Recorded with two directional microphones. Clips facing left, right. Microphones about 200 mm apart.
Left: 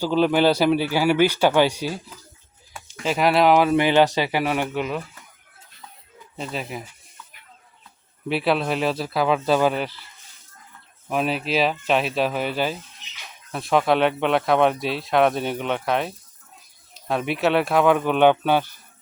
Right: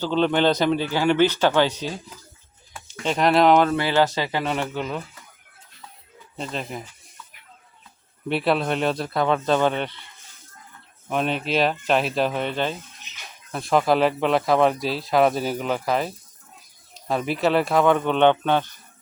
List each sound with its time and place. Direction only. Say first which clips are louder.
0.0 s a man's voice: left 2 dB; 10° left (ahead or behind)
3.0 s speech: even; 5° left (ahead or behind)
3.8 s a man's voice: left 3 dB; 15° left (ahead or behind)
6.3 s speech: even; 5° left (ahead or behind)
8.3 s speech: even; centre (ahead or behind)
11.1 s speech: even; 5° left (ahead or behind)